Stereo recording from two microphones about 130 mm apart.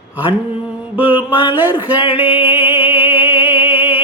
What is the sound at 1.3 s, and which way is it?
Speech, 35° left (ahead or behind).